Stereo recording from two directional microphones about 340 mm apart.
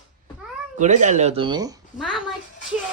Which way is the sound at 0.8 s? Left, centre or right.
Right.